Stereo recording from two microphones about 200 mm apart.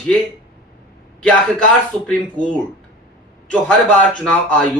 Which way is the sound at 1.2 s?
5° left (ahead or behind).